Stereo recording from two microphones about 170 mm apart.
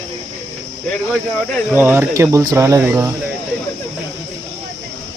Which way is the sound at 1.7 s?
10° right (ahead or behind).